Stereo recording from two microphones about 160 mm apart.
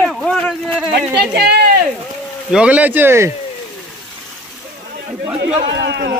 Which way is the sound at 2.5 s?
5° right (ahead or behind).